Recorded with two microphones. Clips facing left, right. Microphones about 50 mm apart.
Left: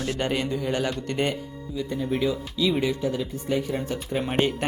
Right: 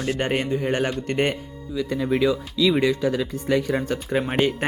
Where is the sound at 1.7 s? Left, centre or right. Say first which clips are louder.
Right 4 dB; right.